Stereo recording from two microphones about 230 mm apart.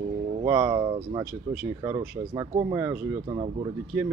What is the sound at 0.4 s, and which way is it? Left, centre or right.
Speech, centre.